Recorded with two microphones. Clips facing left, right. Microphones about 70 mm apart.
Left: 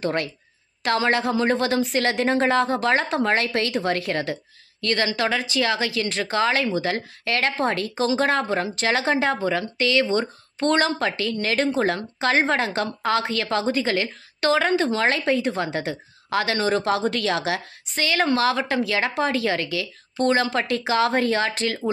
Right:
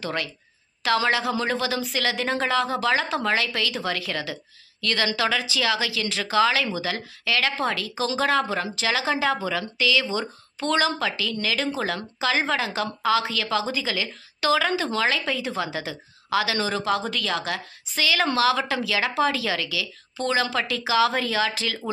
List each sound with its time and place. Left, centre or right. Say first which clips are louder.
0.0 s a woman's voice: left 4 dB; left
1.6 s a woman's voice: left 4 dB; left
4.8 s a woman's voice: left 1 dB; left
5.4 s a woman's voice: left 2 dB; left
8.1 s speech: even; left
8.7 s a woman's voice: left 2 dB; left
9.1 s speech: left 2 dB; left
9.8 s a woman's voice: left 3 dB; left
17.1 s a woman's voice: left 4 dB; left
17.9 s speech: left 1 dB; left